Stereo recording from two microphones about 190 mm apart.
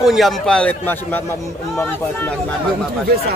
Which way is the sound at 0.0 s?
Centre (ahead or behind).